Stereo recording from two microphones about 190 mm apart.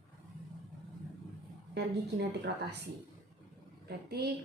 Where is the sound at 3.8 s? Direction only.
55° right (ahead or behind).